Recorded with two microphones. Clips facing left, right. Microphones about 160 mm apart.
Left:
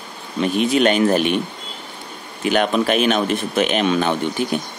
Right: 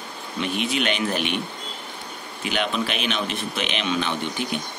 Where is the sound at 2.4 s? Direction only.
50° left (ahead or behind).